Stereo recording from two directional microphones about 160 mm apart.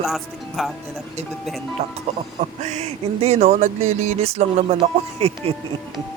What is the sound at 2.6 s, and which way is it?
Speech, 45° right (ahead or behind).